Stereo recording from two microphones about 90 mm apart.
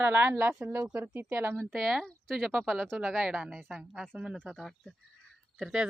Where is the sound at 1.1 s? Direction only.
25° right (ahead or behind).